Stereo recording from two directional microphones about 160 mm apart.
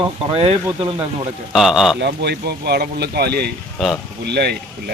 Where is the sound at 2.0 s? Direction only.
90° right.